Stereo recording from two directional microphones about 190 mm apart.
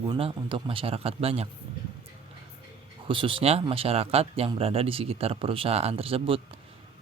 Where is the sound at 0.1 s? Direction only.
25° right (ahead or behind).